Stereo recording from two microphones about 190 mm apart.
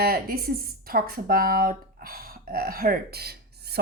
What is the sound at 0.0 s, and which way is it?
A woman's voice, 50° right (ahead or behind).